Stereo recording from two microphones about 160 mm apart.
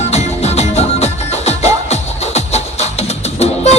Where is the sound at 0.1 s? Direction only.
40° left (ahead or behind).